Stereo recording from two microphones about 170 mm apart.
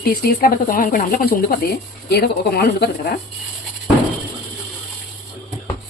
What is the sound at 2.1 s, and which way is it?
Speech, 70° left (ahead or behind).